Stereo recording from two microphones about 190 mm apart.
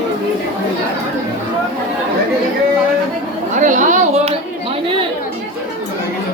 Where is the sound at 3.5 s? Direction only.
40° right (ahead or behind).